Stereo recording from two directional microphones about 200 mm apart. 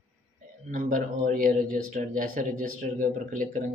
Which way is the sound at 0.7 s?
40° right (ahead or behind).